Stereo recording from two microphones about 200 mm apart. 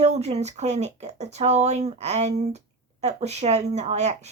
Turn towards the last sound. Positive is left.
turn(degrees=-35)  # may be behind; listen again after turning